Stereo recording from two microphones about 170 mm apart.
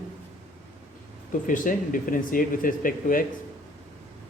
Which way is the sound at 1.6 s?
55° left (ahead or behind).